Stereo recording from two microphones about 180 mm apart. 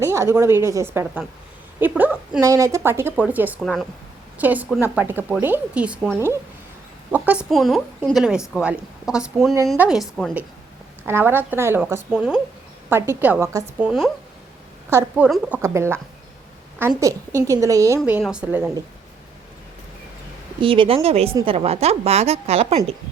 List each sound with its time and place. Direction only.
0.0 s a woman's voice: 15° right (ahead or behind); by 10.3 s centre (ahead or behind)
11.0 s a woman's voice: 15° right (ahead or behind)
13.7 s a woman's voice: 5° right (ahead or behind)
14.8 s a woman's voice: 15° right (ahead or behind)
20.6 s a woman's voice: 30° right (ahead or behind)